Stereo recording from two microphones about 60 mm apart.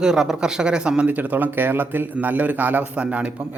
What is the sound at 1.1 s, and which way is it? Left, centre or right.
A man's voice, right.